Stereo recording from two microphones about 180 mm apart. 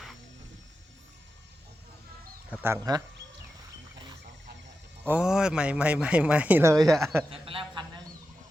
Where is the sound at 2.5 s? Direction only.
10° right (ahead or behind).